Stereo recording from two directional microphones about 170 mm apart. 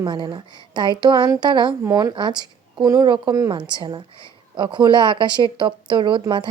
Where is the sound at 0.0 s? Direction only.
25° right (ahead or behind).